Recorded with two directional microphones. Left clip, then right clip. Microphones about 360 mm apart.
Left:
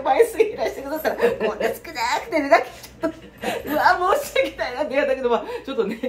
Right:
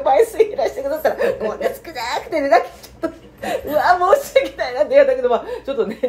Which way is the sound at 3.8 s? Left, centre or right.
Centre.